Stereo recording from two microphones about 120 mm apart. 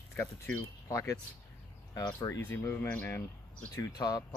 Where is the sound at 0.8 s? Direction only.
25° left (ahead or behind).